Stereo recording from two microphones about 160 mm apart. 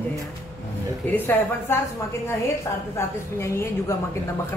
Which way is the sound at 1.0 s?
10° left (ahead or behind).